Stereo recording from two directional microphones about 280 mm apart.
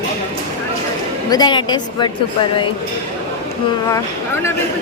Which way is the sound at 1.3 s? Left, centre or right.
Centre.